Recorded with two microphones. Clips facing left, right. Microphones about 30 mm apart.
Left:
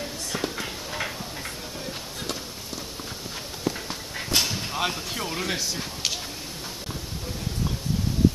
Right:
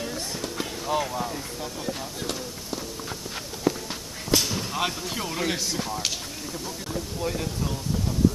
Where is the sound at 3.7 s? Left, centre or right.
Centre.